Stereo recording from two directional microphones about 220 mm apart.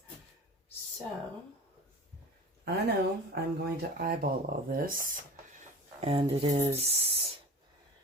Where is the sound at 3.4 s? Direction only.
45° right (ahead or behind).